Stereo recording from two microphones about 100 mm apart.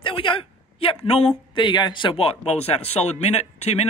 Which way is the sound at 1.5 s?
50° left (ahead or behind).